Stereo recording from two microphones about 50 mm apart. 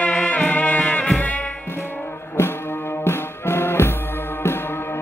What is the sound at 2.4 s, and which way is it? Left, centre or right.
Music, left.